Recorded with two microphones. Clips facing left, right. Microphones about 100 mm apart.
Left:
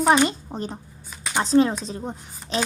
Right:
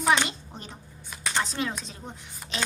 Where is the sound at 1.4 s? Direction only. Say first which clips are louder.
Left 12 dB; 35° left (ahead or behind).